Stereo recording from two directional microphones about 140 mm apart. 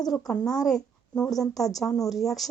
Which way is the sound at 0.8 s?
25° left (ahead or behind).